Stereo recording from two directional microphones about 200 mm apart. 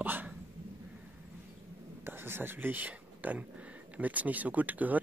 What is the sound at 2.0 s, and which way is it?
Speech, 10° right (ahead or behind).